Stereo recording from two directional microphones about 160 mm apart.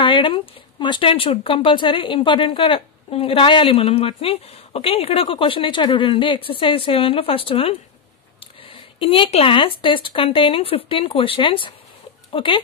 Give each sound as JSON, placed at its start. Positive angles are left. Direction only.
{"t": 0.0, "sound": "speech", "side_deg": 30}